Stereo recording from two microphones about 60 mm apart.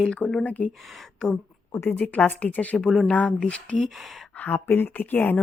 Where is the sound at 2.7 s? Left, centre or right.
Centre.